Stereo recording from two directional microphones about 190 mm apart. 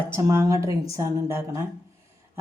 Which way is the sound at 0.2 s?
15° right (ahead or behind).